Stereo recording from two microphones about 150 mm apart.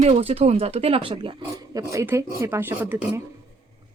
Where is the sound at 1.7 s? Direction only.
20° right (ahead or behind).